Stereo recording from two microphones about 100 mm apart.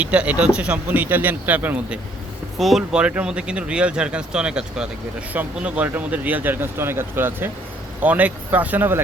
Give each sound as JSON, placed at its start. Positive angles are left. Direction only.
{"t": 0.0, "sound": "speech", "side_deg": -15}
{"t": 2.6, "sound": "speech", "side_deg": 0}